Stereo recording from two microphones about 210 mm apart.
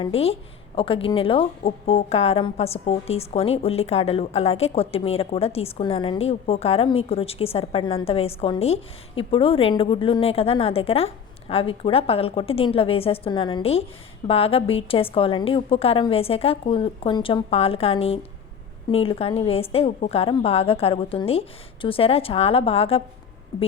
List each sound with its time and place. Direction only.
0.0 s a woman's voice: 30° left (ahead or behind)